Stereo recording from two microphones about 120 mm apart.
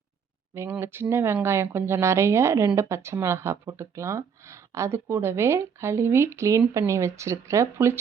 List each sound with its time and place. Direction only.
0.5 s speech: 20° right (ahead or behind)